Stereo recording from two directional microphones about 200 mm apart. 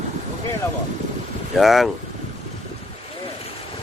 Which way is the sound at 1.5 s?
Centre (ahead or behind).